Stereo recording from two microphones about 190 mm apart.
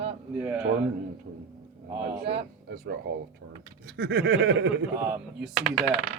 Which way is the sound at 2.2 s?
60° right (ahead or behind).